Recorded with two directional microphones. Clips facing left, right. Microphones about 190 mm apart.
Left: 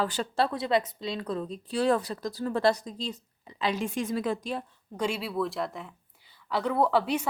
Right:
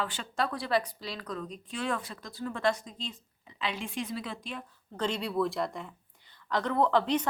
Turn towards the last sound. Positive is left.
turn(degrees=10)  # may be behind; listen again after turning